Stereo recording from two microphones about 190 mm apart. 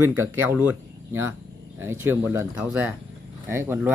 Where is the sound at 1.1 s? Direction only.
10° right (ahead or behind).